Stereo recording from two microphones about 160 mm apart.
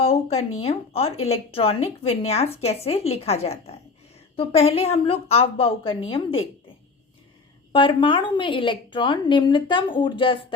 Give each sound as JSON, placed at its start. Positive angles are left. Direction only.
{"t": 0.0, "sound": "a woman's voice", "side_deg": 40}
{"t": 7.7, "sound": "a woman's voice", "side_deg": 30}